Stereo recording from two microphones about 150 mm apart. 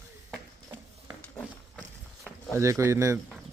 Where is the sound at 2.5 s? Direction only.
20° right (ahead or behind).